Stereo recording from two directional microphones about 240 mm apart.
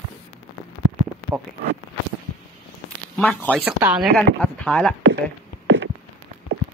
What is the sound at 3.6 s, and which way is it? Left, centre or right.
Speech, centre.